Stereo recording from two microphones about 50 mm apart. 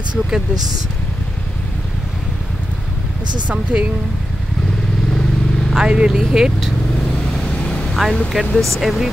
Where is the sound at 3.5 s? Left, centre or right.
Right.